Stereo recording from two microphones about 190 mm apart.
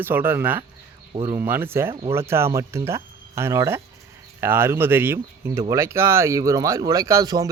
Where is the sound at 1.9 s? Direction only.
30° right (ahead or behind).